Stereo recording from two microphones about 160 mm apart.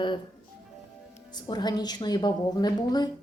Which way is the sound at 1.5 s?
25° left (ahead or behind).